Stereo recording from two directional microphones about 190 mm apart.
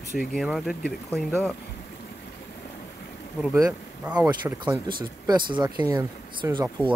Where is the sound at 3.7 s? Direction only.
5° right (ahead or behind).